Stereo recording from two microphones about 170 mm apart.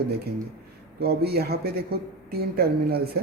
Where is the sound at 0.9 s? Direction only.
70° right (ahead or behind).